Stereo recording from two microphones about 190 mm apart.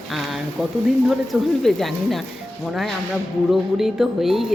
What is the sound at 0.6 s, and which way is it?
Speech, centre (ahead or behind).